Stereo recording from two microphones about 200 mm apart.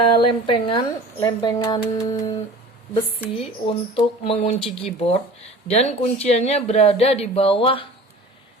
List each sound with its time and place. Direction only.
0.0 s speech: 25° left (ahead or behind)
3.3 s speech: 30° left (ahead or behind)